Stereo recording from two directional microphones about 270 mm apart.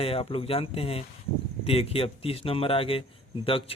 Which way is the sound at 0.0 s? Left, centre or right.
Left.